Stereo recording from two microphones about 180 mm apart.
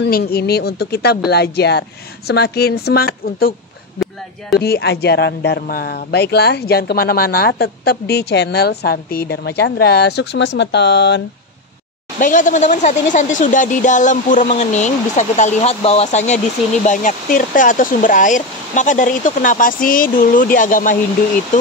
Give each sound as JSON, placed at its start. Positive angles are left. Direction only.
{"t": 0.0, "sound": "speech", "side_deg": 60}
{"t": 4.6, "sound": "speech", "side_deg": 65}
{"t": 12.2, "sound": "speech", "side_deg": 45}